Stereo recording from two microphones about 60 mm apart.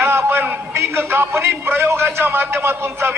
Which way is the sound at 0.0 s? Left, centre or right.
Right.